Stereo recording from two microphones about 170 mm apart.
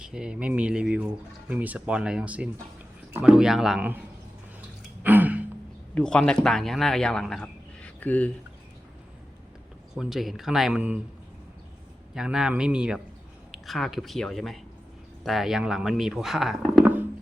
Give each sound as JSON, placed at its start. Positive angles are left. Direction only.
{"t": 0.0, "sound": "speech", "side_deg": -5}
{"t": 5.0, "sound": "gasp", "side_deg": -10}
{"t": 5.9, "sound": "speech", "side_deg": 5}
{"t": 9.9, "sound": "speech", "side_deg": 0}
{"t": 12.1, "sound": "speech", "side_deg": -5}